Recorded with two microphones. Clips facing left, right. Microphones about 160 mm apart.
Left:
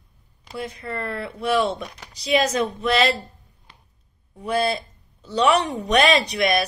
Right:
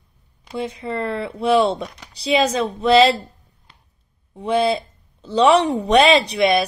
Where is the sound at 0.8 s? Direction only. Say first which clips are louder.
Right 5 dB; 25° right (ahead or behind).